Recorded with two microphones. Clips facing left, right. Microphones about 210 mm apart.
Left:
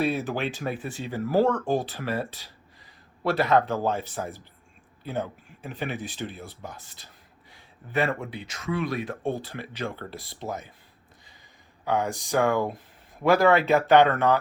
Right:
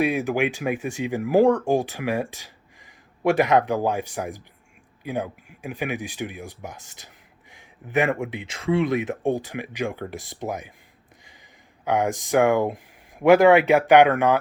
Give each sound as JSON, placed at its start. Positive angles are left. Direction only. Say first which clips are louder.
{"t": 0.0, "sound": "speech", "louder": "right 4 dB", "side_deg": -15}
{"t": 11.9, "sound": "speech", "louder": "right 4 dB", "side_deg": -15}